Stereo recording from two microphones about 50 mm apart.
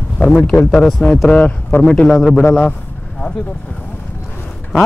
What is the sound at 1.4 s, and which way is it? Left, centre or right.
Speech, left.